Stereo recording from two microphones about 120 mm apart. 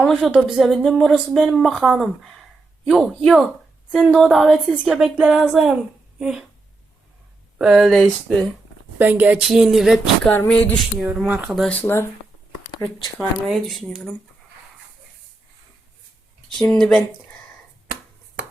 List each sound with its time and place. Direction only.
0.0 s speech: 5° right (ahead or behind)
7.6 s speech: 5° right (ahead or behind)
9.0 s speech: 15° right (ahead or behind)
9.4 s speech: 5° right (ahead or behind)
10.2 s a sound: 10° left (ahead or behind)
11.3 s speech: 15° right (ahead or behind)
11.5 s speech: 5° left (ahead or behind)
11.8 s speech: 20° left (ahead or behind)
13.1 s speech: centre (ahead or behind)
16.6 s speech: 5° left (ahead or behind)